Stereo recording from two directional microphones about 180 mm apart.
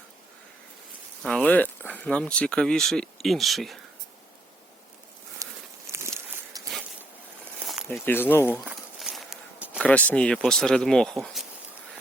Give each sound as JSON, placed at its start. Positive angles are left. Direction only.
{"t": 1.2, "sound": "speech", "side_deg": 5}
{"t": 5.4, "sound": "a sound", "side_deg": -20}
{"t": 5.9, "sound": "walk", "side_deg": -15}
{"t": 8.0, "sound": "speech", "side_deg": 10}
{"t": 8.6, "sound": "walk", "side_deg": 0}
{"t": 9.8, "sound": "speech", "side_deg": 10}